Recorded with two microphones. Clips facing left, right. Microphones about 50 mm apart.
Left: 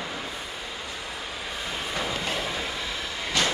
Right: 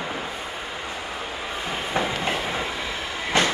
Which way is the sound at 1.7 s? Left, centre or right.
Right.